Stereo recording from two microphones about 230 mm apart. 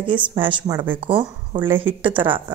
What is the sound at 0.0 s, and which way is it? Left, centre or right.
A woman's voice, right.